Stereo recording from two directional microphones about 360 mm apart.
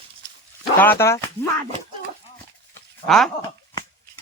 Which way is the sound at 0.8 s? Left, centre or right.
Centre.